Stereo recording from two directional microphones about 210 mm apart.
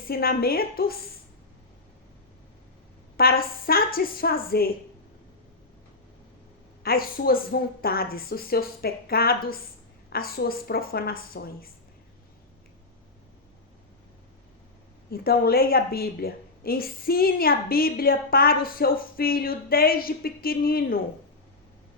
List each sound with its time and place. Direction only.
0.1 s a woman's voice: 45° left (ahead or behind)
3.2 s a woman's voice: 45° left (ahead or behind)
6.8 s a woman's voice: 45° left (ahead or behind)
15.1 s a woman's voice: 45° left (ahead or behind)